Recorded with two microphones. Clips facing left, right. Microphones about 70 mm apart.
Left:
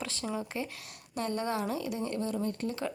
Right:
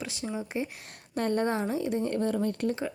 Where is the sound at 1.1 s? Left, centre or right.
Right.